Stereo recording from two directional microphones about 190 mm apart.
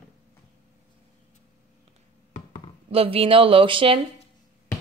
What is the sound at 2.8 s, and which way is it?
Speech, 30° right (ahead or behind).